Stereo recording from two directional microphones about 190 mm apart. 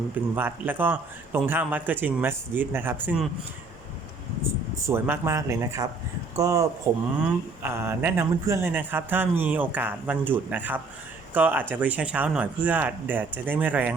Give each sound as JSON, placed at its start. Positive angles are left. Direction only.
{"t": 0.3, "sound": "speech", "side_deg": -10}
{"t": 4.9, "sound": "speech", "side_deg": -10}